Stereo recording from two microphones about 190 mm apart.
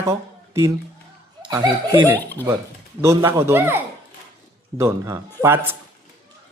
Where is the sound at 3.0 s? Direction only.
15° right (ahead or behind).